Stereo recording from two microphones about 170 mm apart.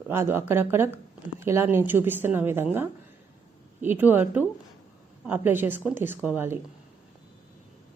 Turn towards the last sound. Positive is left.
turn(degrees=-10)  # may be behind; listen again after turning